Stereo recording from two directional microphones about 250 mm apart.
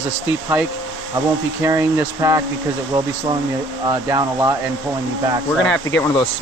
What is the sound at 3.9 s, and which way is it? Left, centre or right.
Speech, centre.